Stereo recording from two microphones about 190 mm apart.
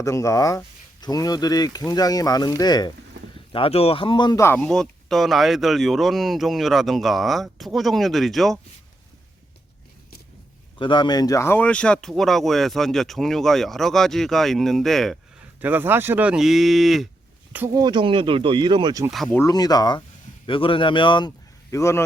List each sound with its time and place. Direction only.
0.0 s speech: 15° left (ahead or behind); by 8.5 s centre (ahead or behind)
10.8 s speech: 25° left (ahead or behind); by 17.1 s centre (ahead or behind)
17.5 s speech: 10° right (ahead or behind)
17.8 s speech: 25° right (ahead or behind)
19.1 s speech: centre (ahead or behind)
19.4 s speech: 20° left (ahead or behind)